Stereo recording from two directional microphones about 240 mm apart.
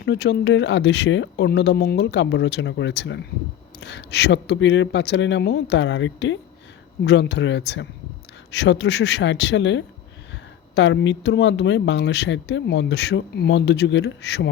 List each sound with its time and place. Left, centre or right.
0.0 s speech: left